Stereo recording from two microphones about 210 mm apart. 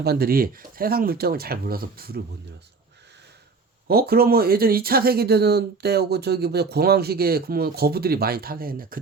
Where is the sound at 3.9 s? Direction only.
45° right (ahead or behind).